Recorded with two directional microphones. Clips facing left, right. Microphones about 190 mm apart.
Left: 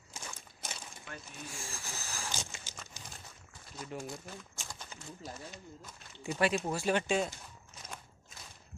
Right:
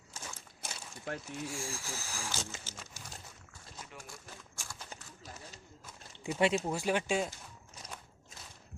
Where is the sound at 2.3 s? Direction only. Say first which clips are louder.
Right 2 dB; 15° left (ahead or behind).